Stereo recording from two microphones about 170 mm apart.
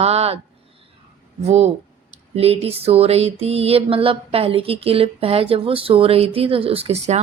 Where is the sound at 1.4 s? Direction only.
40° right (ahead or behind).